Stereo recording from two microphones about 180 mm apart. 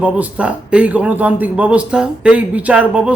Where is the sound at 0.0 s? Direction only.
5° right (ahead or behind).